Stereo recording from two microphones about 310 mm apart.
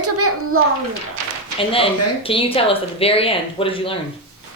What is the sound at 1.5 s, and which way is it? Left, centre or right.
Speech, centre.